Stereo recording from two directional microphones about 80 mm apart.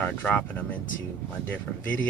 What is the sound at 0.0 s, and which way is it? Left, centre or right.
Speech, left.